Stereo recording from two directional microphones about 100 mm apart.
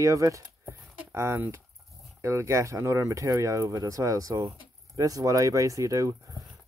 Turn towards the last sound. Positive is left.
turn(degrees=-30)  # may be behind; listen again after turning